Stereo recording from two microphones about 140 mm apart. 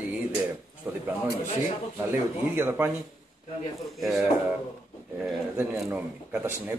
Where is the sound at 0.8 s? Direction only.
15° right (ahead or behind).